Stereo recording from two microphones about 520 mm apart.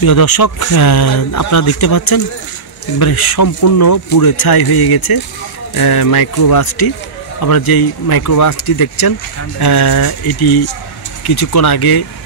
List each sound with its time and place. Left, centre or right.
0.0 s speech: left
3.0 s speech: left